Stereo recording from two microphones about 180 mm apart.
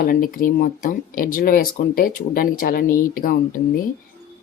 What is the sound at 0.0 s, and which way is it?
Speech, 50° left (ahead or behind).